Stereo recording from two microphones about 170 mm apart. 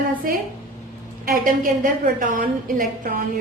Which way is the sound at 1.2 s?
55° right (ahead or behind).